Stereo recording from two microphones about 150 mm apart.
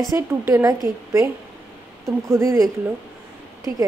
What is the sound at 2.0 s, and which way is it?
Speech, 20° right (ahead or behind).